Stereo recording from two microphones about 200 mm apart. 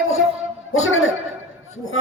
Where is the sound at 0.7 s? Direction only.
90° left.